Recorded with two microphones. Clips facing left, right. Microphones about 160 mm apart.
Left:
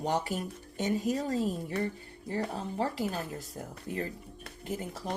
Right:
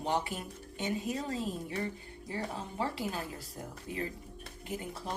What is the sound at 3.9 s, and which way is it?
Speech, 50° left (ahead or behind).